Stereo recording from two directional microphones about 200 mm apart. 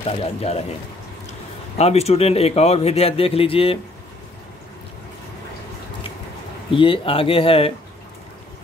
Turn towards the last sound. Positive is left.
turn(degrees=30)  # may be behind; listen again after turning